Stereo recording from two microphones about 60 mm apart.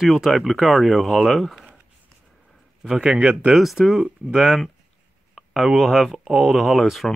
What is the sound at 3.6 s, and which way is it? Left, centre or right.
Speech, centre.